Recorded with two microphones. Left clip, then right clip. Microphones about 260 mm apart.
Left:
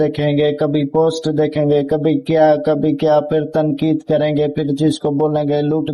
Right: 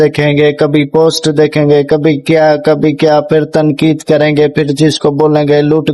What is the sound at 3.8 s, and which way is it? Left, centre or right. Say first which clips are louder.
Speech: right 7 dB; right.